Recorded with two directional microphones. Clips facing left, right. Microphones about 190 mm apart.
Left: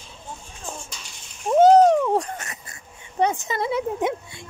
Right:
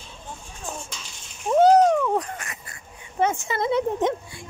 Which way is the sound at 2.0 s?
20° left (ahead or behind).